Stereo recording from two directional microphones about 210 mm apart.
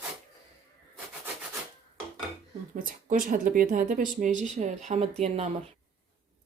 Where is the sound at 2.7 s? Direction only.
40° right (ahead or behind).